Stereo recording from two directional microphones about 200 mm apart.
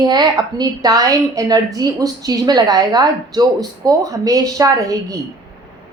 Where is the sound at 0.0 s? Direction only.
20° right (ahead or behind).